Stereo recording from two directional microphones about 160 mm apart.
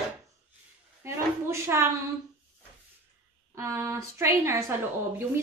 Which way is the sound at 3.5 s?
15° right (ahead or behind).